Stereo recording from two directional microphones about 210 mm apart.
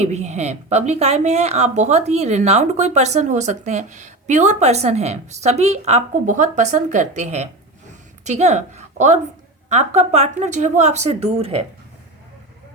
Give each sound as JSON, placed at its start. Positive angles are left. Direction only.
{"t": 0.0, "sound": "a woman's voice", "side_deg": -30}